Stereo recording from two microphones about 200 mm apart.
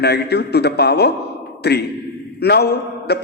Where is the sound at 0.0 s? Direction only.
55° left (ahead or behind).